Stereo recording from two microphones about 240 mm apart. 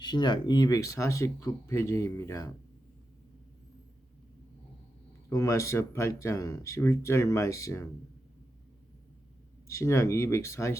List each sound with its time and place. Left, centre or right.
0.0 s speech: centre
5.3 s speech: centre
9.6 s speech: centre